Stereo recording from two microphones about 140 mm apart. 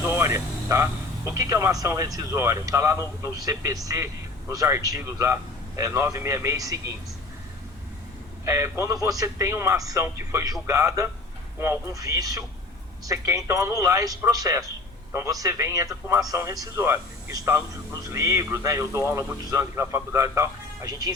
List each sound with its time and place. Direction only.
0.0 s a sound: 20° right (ahead or behind)
1.3 s a man's voice: 20° right (ahead or behind)
8.4 s a man's voice: 20° right (ahead or behind)